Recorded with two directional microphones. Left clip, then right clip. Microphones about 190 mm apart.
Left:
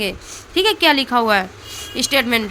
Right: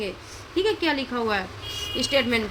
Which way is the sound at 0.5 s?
45° left (ahead or behind).